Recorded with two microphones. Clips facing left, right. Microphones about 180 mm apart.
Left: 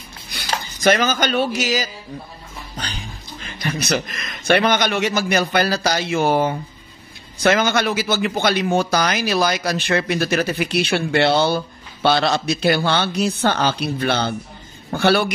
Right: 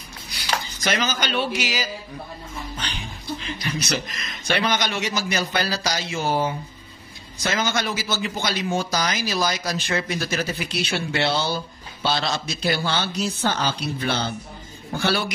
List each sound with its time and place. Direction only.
0.3 s a man's voice: 55° left (ahead or behind)